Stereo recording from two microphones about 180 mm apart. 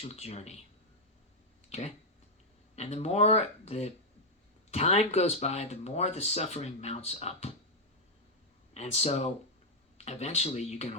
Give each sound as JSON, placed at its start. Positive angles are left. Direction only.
{"t": 0.0, "sound": "speech", "side_deg": 35}
{"t": 1.7, "sound": "speech", "side_deg": 40}
{"t": 8.7, "sound": "speech", "side_deg": 35}